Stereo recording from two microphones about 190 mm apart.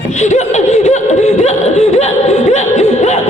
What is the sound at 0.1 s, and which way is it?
Laughter, 40° left (ahead or behind).